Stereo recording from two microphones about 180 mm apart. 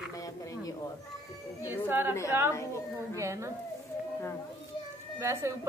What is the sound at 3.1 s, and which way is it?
Speech, 15° right (ahead or behind).